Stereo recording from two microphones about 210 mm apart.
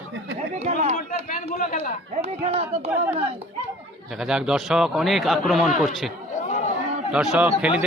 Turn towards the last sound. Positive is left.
turn(degrees=-5)  # may be behind; listen again after turning